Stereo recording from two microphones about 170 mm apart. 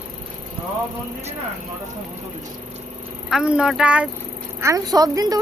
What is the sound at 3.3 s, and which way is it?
Speech, 5° right (ahead or behind).